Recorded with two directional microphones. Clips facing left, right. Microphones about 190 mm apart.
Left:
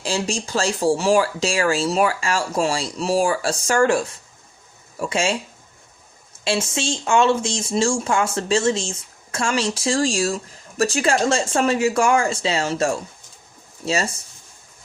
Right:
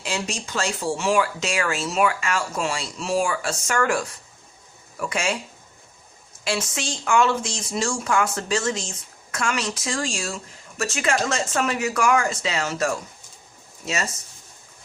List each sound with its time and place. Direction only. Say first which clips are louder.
0.0 s speech: left 5 dB; 30° left (ahead or behind)
6.4 s speech: left 4 dB; 25° left (ahead or behind)